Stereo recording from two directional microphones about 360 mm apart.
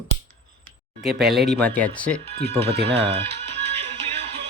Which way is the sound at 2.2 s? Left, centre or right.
Right.